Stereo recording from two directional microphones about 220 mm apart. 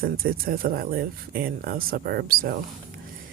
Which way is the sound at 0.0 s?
40° right (ahead or behind).